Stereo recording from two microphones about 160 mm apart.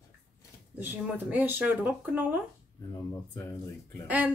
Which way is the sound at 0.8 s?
10° right (ahead or behind).